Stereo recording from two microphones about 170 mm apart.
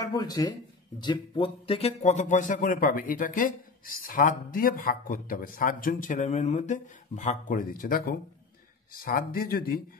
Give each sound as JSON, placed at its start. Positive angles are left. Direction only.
{"t": 0.0, "sound": "speech", "side_deg": 20}